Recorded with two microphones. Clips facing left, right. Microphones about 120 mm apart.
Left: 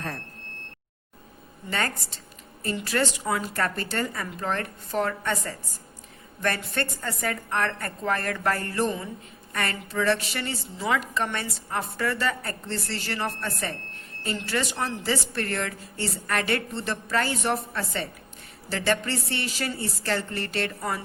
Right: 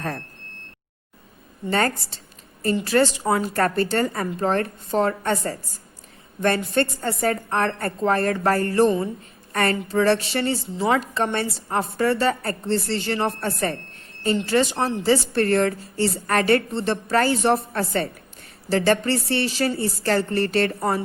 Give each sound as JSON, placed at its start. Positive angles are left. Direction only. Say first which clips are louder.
{"t": 1.7, "sound": "a woman's voice", "louder": "right 7 dB", "side_deg": -35}
{"t": 12.6, "sound": "a woman's voice", "louder": "right 10 dB", "side_deg": -25}
{"t": 13.4, "sound": "a woman's voice", "louder": "right 7 dB", "side_deg": -45}
{"t": 14.3, "sound": "a woman's voice", "louder": "right 8 dB", "side_deg": -25}